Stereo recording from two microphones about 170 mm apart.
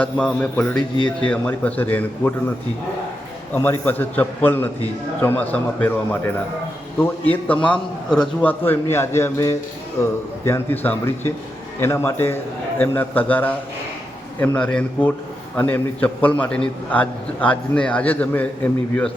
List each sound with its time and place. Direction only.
0.0 s a man's voice: 5° left (ahead or behind)
3.5 s a man's voice: 10° left (ahead or behind)
7.4 s a man's voice: 5° left (ahead or behind)